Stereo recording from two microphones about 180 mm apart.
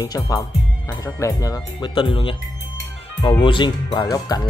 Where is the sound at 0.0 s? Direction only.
20° left (ahead or behind).